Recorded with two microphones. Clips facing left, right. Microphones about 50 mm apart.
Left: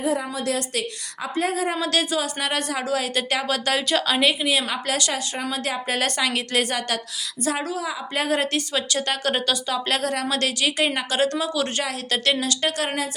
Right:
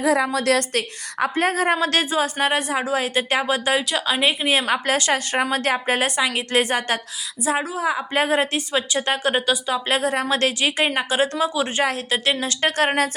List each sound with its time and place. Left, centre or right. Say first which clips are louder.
0.0 s a woman's voice: right 5 dB; right
0.8 s a woman's voice: right 6 dB; right
2.6 s a woman's voice: right 2 dB; centre
4.3 s a woman's voice: right 3 dB; right
5.8 s a woman's voice: right 3 dB; right
6.1 s a woman's voice: right 2 dB; centre
6.5 s a woman's voice: right 3 dB; right
7.5 s a woman's voice: right 4 dB; centre
7.8 s a woman's voice: right 5 dB; right; by 10.2 s centre
10.2 s a woman's voice: right 3 dB; right
12.4 s a woman's voice: right 3 dB; right